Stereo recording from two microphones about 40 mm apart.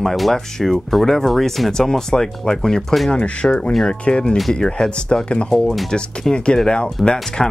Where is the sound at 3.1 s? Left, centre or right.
Left.